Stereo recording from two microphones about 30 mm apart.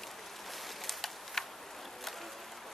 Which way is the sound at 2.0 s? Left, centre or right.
Centre.